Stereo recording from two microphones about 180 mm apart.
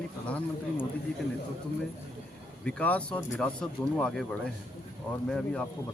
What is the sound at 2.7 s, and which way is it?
Speech, 5° left (ahead or behind).